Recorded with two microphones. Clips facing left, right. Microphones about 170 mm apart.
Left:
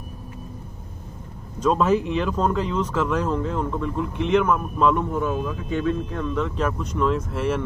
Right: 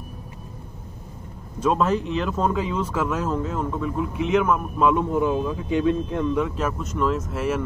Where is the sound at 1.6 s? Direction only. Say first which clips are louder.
Left 2 dB; centre (ahead or behind).